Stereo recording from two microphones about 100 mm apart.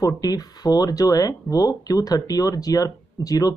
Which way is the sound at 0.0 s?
40° left (ahead or behind).